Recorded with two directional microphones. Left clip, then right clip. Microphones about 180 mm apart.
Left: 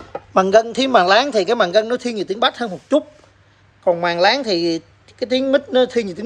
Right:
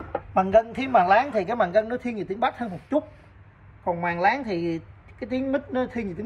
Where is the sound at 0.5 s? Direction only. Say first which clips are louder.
Left 5 dB; 10° left (ahead or behind).